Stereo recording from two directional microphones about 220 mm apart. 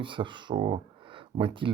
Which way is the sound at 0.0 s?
20° right (ahead or behind).